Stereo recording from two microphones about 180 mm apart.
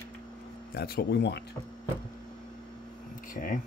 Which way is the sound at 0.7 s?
60° left (ahead or behind).